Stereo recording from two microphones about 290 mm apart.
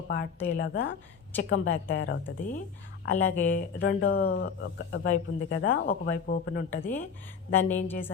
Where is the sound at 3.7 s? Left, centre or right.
Left.